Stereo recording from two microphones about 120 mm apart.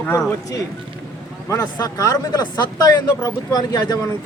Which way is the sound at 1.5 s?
30° left (ahead or behind).